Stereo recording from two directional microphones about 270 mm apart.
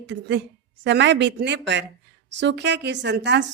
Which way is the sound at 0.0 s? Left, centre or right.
Right.